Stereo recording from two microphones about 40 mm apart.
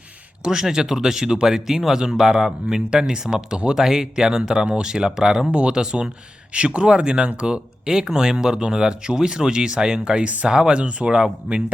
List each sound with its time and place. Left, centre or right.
0.4 s speech: centre
5.5 s speech: right